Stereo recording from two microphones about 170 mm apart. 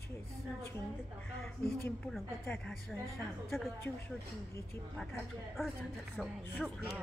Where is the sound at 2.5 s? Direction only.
5° left (ahead or behind).